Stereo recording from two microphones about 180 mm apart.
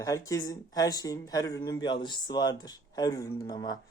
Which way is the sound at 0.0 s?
20° left (ahead or behind).